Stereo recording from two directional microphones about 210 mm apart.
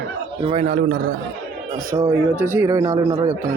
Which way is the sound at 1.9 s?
25° right (ahead or behind).